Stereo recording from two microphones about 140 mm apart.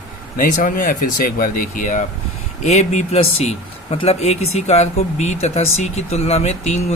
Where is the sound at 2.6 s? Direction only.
55° left (ahead or behind).